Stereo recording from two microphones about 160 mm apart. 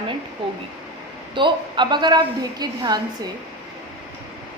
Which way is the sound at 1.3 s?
30° right (ahead or behind).